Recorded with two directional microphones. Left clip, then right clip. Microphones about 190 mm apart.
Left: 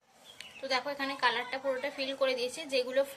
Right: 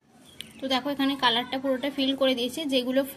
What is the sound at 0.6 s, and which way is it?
A woman's voice, 20° right (ahead or behind).